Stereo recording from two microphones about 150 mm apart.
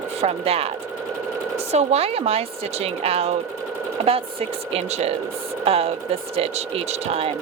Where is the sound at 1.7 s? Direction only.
45° right (ahead or behind).